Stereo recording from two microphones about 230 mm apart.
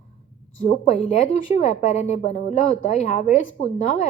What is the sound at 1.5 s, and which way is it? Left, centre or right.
A woman's voice, left.